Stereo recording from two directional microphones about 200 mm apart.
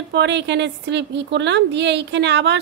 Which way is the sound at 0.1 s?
60° right (ahead or behind).